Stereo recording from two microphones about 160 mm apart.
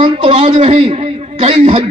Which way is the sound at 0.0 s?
35° right (ahead or behind).